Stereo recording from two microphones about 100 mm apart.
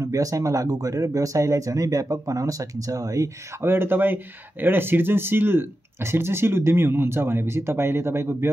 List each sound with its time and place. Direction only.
0.0 s speech: 35° right (ahead or behind)
3.6 s speech: 20° right (ahead or behind)